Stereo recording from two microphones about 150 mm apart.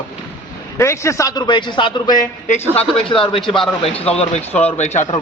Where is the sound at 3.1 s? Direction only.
35° left (ahead or behind).